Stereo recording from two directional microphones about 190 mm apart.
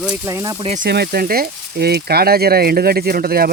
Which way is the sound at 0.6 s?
35° right (ahead or behind).